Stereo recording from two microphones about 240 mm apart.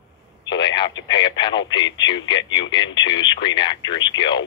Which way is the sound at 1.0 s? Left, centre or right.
Centre.